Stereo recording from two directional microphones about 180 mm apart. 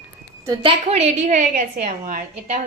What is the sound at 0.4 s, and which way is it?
A woman's voice, 30° right (ahead or behind).